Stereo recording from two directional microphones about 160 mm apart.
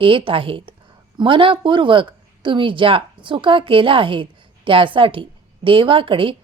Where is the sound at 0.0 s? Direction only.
35° right (ahead or behind).